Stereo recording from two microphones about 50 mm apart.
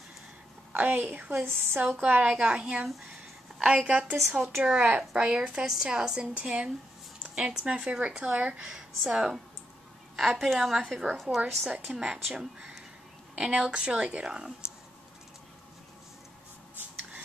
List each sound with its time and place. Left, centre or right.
0.7 s a woman's voice: right
1.4 s a woman's voice: right
2.2 s speech: centre
2.9 s a sound: centre
3.6 s speech: right
4.4 s a woman's voice: centre
4.7 s speech: right
5.1 s a woman's voice: centre
10.1 s a woman's voice: centre
13.4 s speech: right